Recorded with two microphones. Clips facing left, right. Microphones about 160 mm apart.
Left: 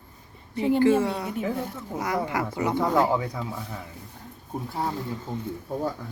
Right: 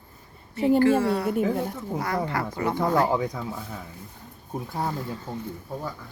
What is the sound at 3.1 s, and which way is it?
Speech, 15° right (ahead or behind).